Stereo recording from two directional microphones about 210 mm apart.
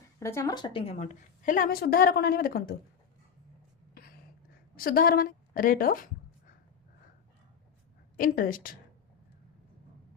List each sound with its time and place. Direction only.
0.2 s a woman's voice: 15° left (ahead or behind); by 2.7 s 45° left (ahead or behind)
4.8 s a woman's voice: 45° left (ahead or behind)
8.1 s a woman's voice: 40° left (ahead or behind)